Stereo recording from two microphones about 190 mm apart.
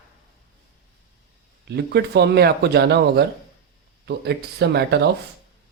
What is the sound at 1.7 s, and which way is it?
Speech, 60° right (ahead or behind).